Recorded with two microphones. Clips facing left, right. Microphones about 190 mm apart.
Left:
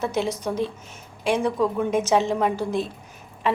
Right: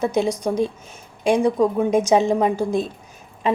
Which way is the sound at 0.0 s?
15° right (ahead or behind).